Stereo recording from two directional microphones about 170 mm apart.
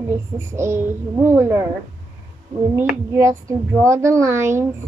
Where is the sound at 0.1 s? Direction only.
15° right (ahead or behind).